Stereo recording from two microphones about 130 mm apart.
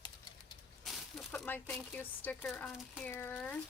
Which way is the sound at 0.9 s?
Centre (ahead or behind).